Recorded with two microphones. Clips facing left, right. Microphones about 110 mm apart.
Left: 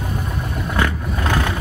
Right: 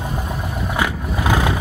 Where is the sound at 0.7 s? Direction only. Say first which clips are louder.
Left 1 dB; 10° right (ahead or behind).